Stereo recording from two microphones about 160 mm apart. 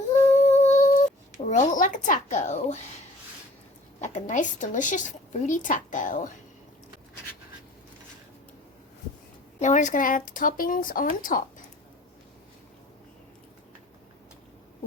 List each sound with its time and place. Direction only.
0.3 s humming: 45° left (ahead or behind)
1.5 s speech: 50° left (ahead or behind)
4.0 s speech: 50° left (ahead or behind)
9.6 s speech: 50° left (ahead or behind)